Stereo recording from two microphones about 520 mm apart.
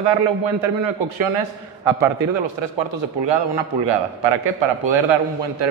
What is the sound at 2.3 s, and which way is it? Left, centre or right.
A man's voice, right.